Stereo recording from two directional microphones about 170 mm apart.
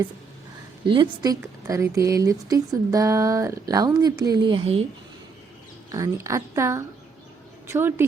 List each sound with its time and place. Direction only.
0.9 s speech: 25° right (ahead or behind)
5.9 s a woman's voice: 20° right (ahead or behind)